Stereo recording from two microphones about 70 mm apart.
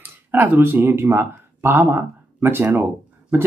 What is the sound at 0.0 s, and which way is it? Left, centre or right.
Speech, right.